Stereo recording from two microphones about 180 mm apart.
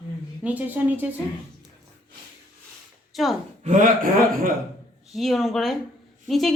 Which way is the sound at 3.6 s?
45° right (ahead or behind).